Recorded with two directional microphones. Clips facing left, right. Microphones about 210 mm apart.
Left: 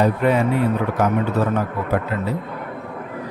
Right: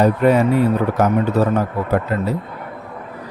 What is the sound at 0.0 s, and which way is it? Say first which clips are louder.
Speech: right 4 dB; 40° right (ahead or behind).